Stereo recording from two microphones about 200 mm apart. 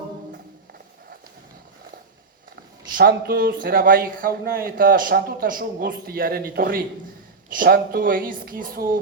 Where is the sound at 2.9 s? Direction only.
50° right (ahead or behind).